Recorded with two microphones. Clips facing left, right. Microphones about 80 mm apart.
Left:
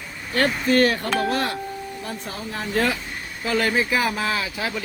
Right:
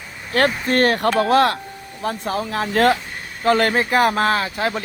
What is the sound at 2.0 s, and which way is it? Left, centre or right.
Speech, right.